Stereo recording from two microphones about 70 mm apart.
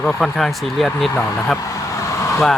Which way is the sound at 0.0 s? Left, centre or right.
Centre.